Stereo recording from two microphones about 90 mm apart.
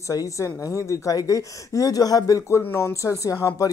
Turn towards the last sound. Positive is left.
turn(degrees=35)  # may be behind; listen again after turning